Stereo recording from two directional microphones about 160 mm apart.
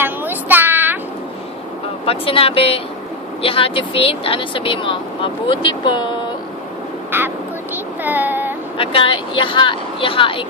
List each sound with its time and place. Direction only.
0.0 s child singing: 10° right (ahead or behind)
2.0 s speech: 35° left (ahead or behind)
7.1 s speech: 15° right (ahead or behind)
7.7 s child singing: 10° right (ahead or behind)
8.7 s speech: 35° left (ahead or behind)